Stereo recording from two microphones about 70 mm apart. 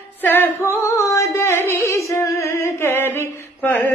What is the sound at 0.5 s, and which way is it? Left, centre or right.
Music, left.